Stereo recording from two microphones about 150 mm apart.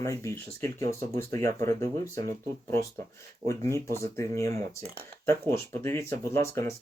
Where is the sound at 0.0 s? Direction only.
20° left (ahead or behind).